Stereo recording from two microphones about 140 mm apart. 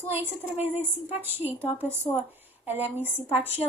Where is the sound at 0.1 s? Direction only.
15° right (ahead or behind).